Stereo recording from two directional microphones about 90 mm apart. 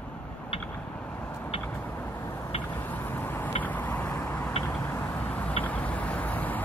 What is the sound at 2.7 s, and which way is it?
Vehicle, 20° left (ahead or behind).